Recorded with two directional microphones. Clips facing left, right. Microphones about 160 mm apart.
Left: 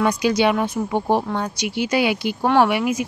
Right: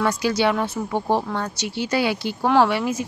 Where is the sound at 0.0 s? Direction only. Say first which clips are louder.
Left 2 dB; 15° left (ahead or behind).